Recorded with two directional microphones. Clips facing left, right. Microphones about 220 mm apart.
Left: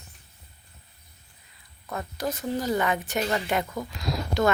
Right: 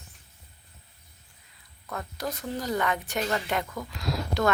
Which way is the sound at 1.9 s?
5° left (ahead or behind).